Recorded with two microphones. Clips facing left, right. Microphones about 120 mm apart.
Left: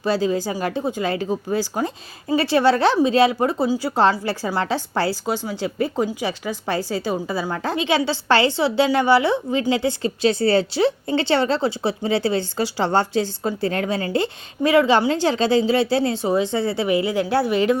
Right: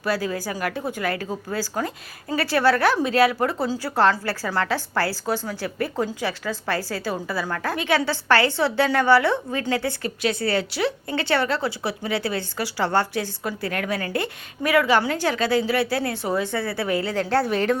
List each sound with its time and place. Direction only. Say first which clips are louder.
0.0 s speech: left 5 dB; 20° left (ahead or behind)